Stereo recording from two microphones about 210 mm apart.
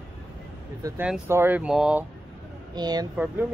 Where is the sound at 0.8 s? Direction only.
10° right (ahead or behind).